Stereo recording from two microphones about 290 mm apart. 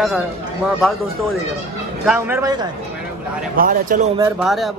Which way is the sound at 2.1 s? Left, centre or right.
Centre.